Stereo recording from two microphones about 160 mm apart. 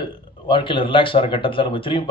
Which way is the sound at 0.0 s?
30° left (ahead or behind).